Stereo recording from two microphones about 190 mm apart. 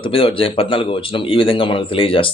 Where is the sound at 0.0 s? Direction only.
30° left (ahead or behind).